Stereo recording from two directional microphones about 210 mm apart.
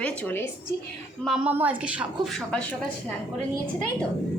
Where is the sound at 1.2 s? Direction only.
5° right (ahead or behind).